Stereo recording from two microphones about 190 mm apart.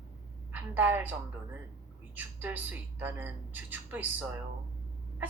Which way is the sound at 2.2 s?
10° right (ahead or behind).